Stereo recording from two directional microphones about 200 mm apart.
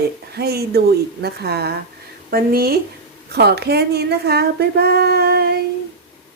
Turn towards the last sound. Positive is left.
turn(degrees=-55)  # may be behind; listen again after turning